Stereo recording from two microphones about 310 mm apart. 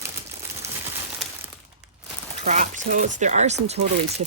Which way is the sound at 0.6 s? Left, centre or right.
Centre.